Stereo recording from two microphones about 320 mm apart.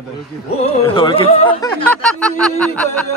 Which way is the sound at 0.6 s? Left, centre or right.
Centre.